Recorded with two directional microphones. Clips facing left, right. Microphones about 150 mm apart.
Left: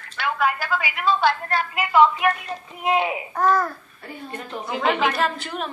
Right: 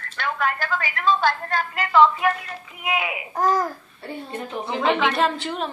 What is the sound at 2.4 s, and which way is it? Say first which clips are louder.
Speech: left 5 dB; 35° left (ahead or behind).